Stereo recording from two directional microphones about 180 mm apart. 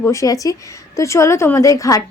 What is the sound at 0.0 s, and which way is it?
A woman's voice, 15° left (ahead or behind).